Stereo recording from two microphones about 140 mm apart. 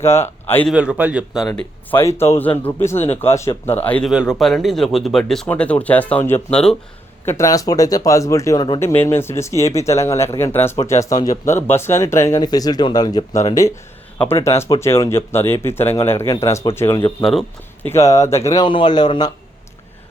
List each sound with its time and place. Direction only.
0.0 s speech: 20° left (ahead or behind)
0.7 s a man's voice: 10° right (ahead or behind)
1.9 s a man's voice: 15° left (ahead or behind)
4.1 s a man's voice: 5° right (ahead or behind); by 19.3 s 30° left (ahead or behind)